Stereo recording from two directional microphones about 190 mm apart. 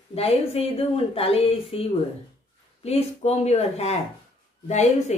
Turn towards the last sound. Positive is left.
turn(degrees=35)  # may be behind; listen again after turning